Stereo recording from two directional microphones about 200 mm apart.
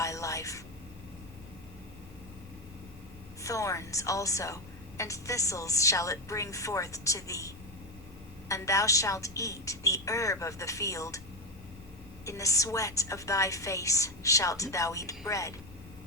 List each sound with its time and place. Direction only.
0.0 s a sound: 15° left (ahead or behind)
3.4 s a woman's voice: 15° left (ahead or behind)
12.2 s a woman's voice: 15° left (ahead or behind)